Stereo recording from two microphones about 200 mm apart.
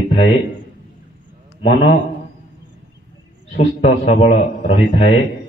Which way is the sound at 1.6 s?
30° left (ahead or behind).